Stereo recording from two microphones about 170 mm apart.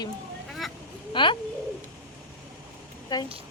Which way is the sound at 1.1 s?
30° left (ahead or behind).